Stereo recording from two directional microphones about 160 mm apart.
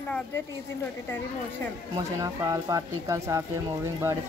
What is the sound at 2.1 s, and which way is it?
Speech, 20° right (ahead or behind).